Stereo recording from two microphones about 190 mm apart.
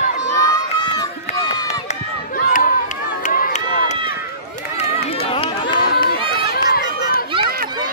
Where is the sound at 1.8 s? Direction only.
45° left (ahead or behind).